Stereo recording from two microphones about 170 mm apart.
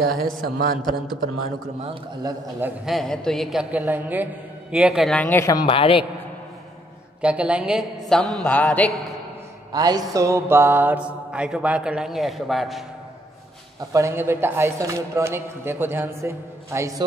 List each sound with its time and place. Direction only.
0.2 s a man's voice: 60° right (ahead or behind)
2.6 s a man's voice: centre (ahead or behind); by 6.0 s 30° left (ahead or behind)
7.2 s mantra: 5° right (ahead or behind)
8.1 s a sound: 5° left (ahead or behind)
9.7 s mantra: 25° right (ahead or behind); by 12.8 s centre (ahead or behind)
13.7 s mantra: 15° right (ahead or behind)